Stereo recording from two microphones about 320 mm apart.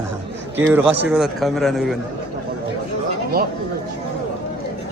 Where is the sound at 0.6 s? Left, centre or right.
Centre.